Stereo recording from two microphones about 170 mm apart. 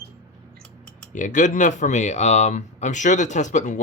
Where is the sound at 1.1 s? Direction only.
50° left (ahead or behind).